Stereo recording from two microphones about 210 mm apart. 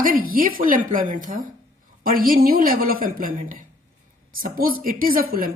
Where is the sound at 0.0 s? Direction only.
40° right (ahead or behind).